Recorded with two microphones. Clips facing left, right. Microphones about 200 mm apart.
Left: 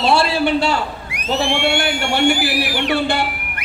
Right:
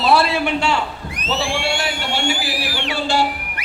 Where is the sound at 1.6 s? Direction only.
60° left (ahead or behind).